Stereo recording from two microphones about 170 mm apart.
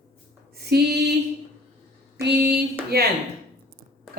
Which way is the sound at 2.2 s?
65° right (ahead or behind).